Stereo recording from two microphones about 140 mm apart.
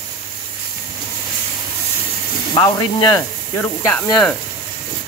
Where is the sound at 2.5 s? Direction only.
30° left (ahead or behind).